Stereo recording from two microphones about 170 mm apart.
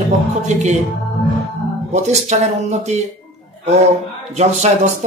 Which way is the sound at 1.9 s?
40° right (ahead or behind).